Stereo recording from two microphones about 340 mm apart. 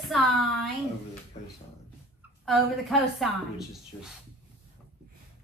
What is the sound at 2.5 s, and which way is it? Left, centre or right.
A woman's voice, centre.